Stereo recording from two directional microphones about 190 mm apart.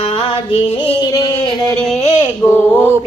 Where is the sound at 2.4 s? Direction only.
10° left (ahead or behind).